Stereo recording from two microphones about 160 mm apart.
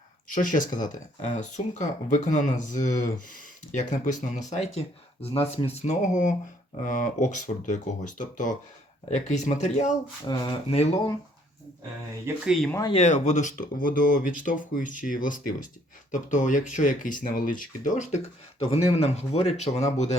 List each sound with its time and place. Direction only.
0.3 s speech: 55° left (ahead or behind)
10.2 s speech: 30° left (ahead or behind)
12.9 s speech: 45° left (ahead or behind)